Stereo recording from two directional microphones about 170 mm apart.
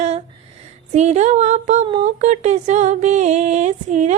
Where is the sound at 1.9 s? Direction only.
35° right (ahead or behind).